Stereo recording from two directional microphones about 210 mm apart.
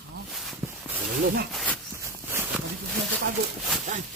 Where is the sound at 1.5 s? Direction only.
5° left (ahead or behind).